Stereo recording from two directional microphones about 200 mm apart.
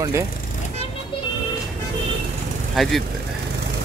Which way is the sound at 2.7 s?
Centre (ahead or behind).